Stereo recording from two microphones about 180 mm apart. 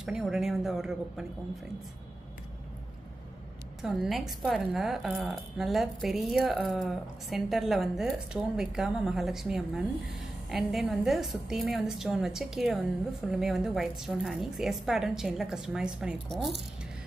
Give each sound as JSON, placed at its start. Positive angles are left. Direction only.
{"t": 0.0, "sound": "a woman's voice", "side_deg": -5}
{"t": 3.8, "sound": "a woman's voice", "side_deg": 0}